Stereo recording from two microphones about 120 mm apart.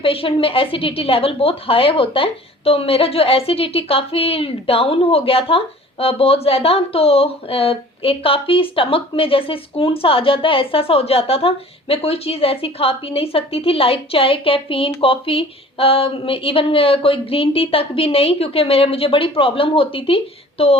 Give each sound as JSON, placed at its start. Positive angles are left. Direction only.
{"t": 0.0, "sound": "a woman's voice", "side_deg": 50}